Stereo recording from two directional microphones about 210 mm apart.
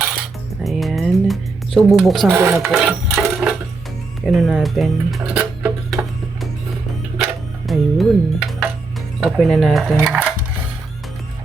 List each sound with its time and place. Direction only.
0.6 s music: centre (ahead or behind)
2.3 s speech: 10° right (ahead or behind)
2.6 s a sound: centre (ahead or behind)
4.3 s speech: centre (ahead or behind)
7.7 s speech: centre (ahead or behind)